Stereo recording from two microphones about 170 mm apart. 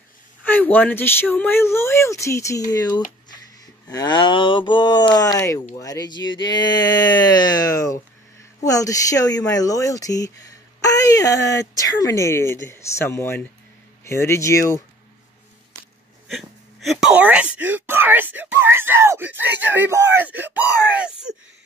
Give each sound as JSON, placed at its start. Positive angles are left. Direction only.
{"t": 0.4, "sound": "speech", "side_deg": 10}
{"t": 16.3, "sound": "speech", "side_deg": 0}